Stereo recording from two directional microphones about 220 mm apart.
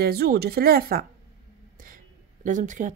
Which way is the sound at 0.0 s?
45° right (ahead or behind).